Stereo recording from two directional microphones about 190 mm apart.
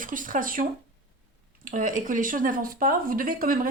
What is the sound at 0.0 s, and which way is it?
Speech, 45° right (ahead or behind).